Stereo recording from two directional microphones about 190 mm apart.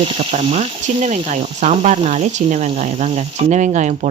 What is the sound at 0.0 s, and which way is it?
Speech, 30° right (ahead or behind).